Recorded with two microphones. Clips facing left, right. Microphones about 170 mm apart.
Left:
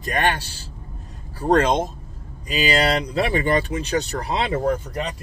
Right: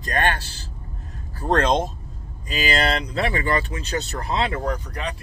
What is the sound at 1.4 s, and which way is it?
Speech, 10° left (ahead or behind).